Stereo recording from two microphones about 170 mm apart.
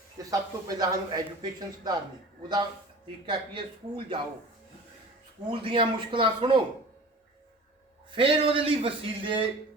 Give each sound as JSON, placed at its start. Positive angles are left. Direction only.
{"t": 0.2, "sound": "a man's voice", "side_deg": -20}
{"t": 5.5, "sound": "speech", "side_deg": -30}
{"t": 8.1, "sound": "a man's voice", "side_deg": -30}